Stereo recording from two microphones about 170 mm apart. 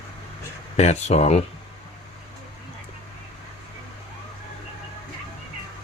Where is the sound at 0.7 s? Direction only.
40° left (ahead or behind).